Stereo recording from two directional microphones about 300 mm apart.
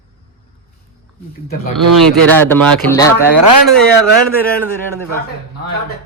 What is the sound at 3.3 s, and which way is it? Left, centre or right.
Speech, right.